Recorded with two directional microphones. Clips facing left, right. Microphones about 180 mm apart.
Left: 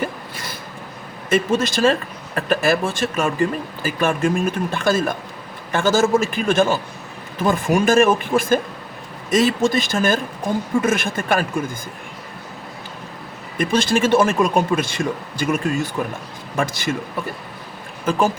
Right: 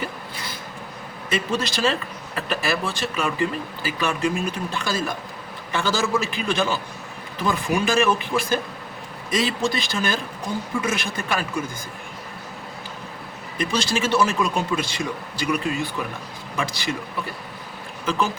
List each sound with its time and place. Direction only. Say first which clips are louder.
1.3 s speech: left 6 dB; 50° left (ahead or behind)
13.6 s speech: left 6 dB; 50° left (ahead or behind)
18.0 s speech: left 5 dB; 50° left (ahead or behind)